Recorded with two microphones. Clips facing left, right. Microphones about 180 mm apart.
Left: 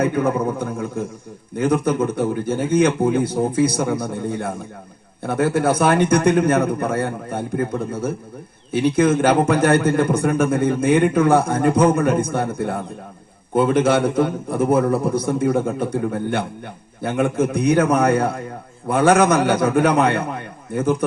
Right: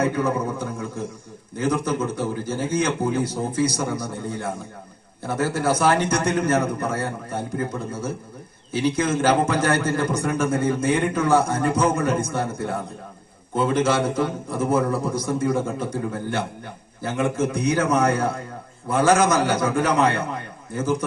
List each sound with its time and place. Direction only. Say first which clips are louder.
0.0 s a man's voice: left 3 dB; 55° left (ahead or behind)